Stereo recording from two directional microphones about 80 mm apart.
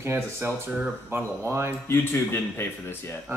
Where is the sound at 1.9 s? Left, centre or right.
Left.